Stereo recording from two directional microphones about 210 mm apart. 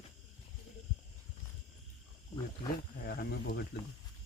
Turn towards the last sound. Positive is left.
turn(degrees=50)  # may be behind; listen again after turning